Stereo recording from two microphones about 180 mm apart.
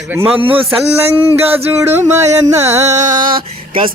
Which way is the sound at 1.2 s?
10° right (ahead or behind).